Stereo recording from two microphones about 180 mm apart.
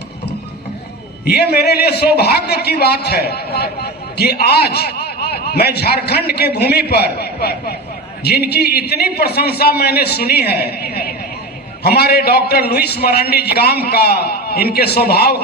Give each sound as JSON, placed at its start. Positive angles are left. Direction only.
{"t": 1.2, "sound": "a man's voice", "side_deg": 60}